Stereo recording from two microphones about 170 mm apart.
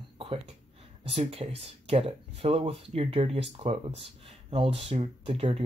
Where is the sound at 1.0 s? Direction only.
35° right (ahead or behind).